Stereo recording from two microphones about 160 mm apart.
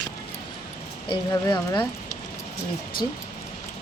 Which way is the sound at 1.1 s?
25° left (ahead or behind).